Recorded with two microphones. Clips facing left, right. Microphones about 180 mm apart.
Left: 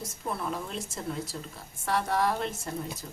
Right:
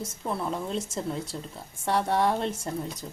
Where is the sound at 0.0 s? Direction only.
25° right (ahead or behind).